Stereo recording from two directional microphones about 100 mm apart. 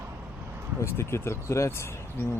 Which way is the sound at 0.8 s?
25° left (ahead or behind).